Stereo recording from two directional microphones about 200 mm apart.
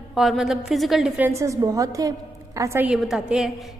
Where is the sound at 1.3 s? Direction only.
15° right (ahead or behind).